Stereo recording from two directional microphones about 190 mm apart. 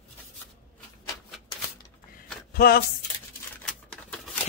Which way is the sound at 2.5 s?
55° left (ahead or behind).